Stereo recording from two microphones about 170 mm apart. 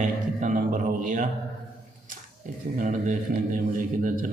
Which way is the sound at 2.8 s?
50° right (ahead or behind).